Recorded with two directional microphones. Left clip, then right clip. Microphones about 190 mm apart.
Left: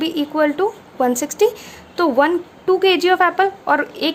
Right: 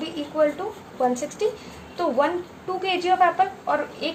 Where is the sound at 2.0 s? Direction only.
55° left (ahead or behind).